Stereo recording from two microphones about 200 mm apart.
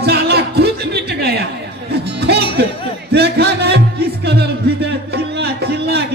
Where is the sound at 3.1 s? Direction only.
55° right (ahead or behind).